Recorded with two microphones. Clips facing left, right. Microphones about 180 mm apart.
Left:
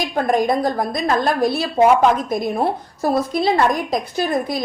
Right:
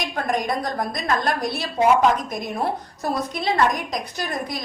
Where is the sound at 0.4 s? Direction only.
30° left (ahead or behind).